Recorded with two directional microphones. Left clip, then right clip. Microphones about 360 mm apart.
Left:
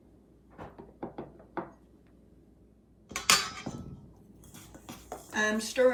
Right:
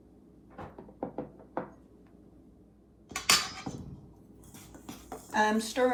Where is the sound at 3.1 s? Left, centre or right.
Centre.